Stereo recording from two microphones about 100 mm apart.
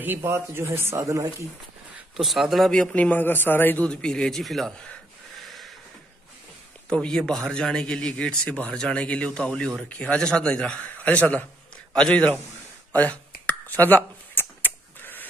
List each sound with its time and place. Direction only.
0.0 s a man's voice: 20° right (ahead or behind)
1.0 s speech: 35° right (ahead or behind)
2.1 s speech: 5° right (ahead or behind)
2.7 s speech: 10° left (ahead or behind)
6.9 s speech: 10° left (ahead or behind)
13.7 s a sound: 20° left (ahead or behind)